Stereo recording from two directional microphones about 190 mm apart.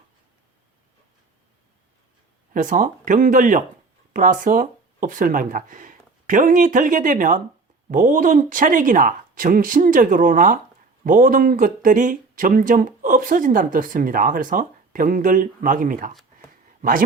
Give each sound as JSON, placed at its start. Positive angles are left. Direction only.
{"t": 2.5, "sound": "speech", "side_deg": -45}